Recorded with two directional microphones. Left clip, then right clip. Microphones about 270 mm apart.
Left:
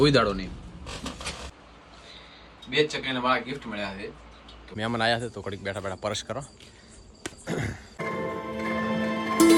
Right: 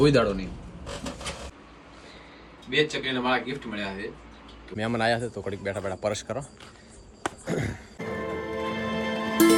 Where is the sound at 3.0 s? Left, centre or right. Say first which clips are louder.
Even; centre.